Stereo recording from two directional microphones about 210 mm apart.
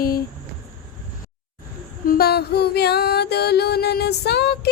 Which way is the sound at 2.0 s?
45° left (ahead or behind).